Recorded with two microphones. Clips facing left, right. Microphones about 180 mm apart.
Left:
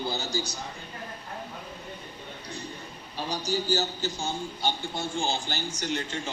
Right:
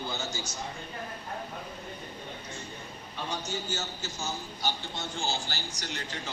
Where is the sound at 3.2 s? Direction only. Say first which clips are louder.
Left 5 dB; 35° left (ahead or behind).